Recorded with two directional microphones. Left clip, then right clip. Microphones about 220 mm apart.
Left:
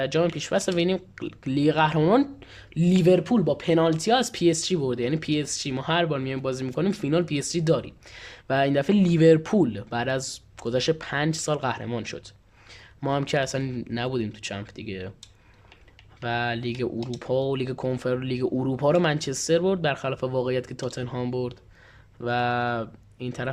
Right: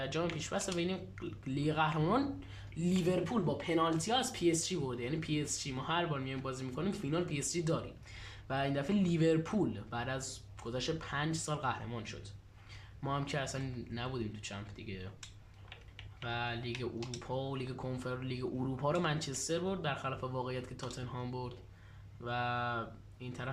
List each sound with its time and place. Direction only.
0.0 s speech: 40° left (ahead or behind)
16.2 s speech: 45° left (ahead or behind)